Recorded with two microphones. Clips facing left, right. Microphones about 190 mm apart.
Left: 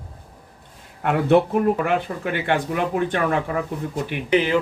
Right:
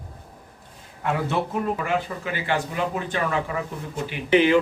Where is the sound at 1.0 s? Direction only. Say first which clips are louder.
Left 8 dB; 60° left (ahead or behind).